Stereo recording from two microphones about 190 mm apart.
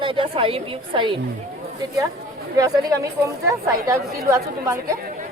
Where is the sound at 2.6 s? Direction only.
20° right (ahead or behind).